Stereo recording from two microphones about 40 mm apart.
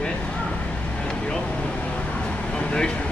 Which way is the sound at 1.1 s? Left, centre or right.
Left.